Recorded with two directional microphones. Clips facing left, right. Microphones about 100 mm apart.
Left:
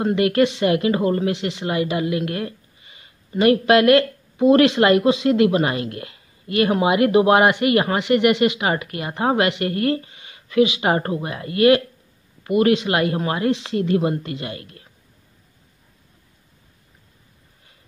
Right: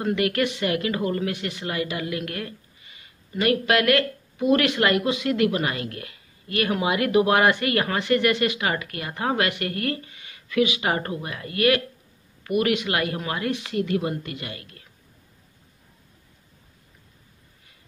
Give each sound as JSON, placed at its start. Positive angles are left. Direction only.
{"t": 0.0, "sound": "speech", "side_deg": 25}